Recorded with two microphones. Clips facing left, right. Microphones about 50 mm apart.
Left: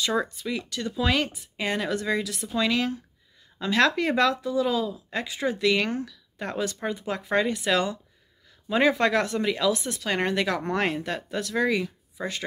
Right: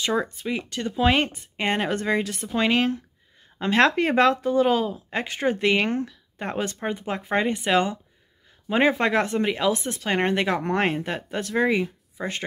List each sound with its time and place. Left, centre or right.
0.0 s speech: right